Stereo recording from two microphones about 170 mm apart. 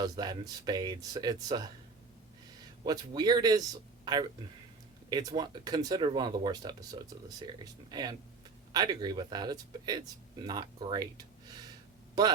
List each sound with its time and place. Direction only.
0.0 s speech: 25° right (ahead or behind)
2.8 s speech: 25° right (ahead or behind)